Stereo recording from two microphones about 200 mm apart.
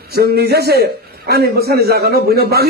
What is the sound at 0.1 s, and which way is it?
A man's voice, 50° right (ahead or behind).